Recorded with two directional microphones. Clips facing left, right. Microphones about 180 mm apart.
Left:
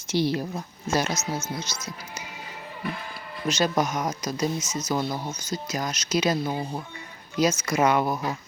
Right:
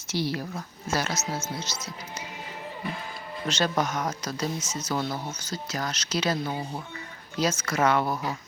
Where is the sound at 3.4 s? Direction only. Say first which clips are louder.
Left 3 dB; 10° left (ahead or behind).